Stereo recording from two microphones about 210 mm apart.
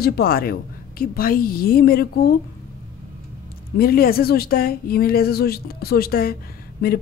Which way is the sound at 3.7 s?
45° left (ahead or behind).